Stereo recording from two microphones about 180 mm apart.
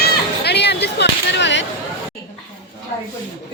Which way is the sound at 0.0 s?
65° left (ahead or behind).